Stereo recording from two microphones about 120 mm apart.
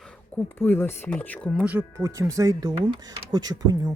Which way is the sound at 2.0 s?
25° right (ahead or behind).